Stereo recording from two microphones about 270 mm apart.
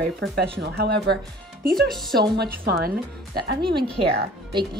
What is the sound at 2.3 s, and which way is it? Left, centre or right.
Speech, right.